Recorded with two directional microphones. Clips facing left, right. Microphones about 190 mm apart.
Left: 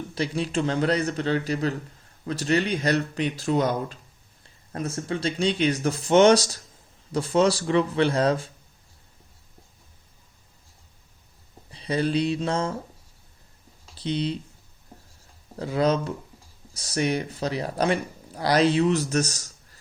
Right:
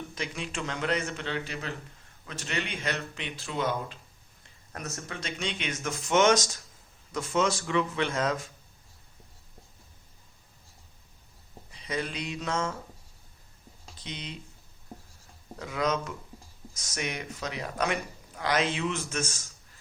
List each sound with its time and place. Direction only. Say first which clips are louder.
0.1 s speech: left 9 dB; 35° left (ahead or behind)
4.4 s speech: left 8 dB; 30° left (ahead or behind)
11.7 s speech: left 9 dB; 30° left (ahead or behind)
13.9 s speech: left 14 dB; 35° left (ahead or behind)
15.5 s speech: left 7 dB; 35° left (ahead or behind)